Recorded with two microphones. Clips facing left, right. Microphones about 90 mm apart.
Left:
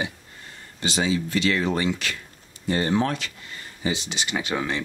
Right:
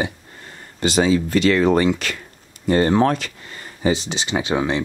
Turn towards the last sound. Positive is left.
turn(degrees=-25)  # may be behind; listen again after turning